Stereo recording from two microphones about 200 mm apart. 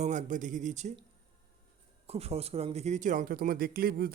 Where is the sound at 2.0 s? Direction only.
30° right (ahead or behind).